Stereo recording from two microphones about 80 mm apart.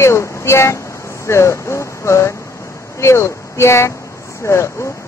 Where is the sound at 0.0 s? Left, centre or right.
Left.